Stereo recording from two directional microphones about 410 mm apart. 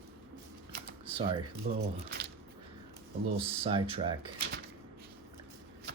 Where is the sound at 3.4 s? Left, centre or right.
Centre.